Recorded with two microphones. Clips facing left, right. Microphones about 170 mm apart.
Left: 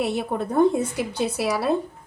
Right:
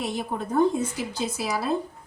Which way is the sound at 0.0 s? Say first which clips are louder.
Left 5 dB; 65° left (ahead or behind).